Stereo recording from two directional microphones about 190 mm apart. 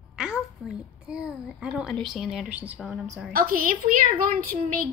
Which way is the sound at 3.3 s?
50° right (ahead or behind).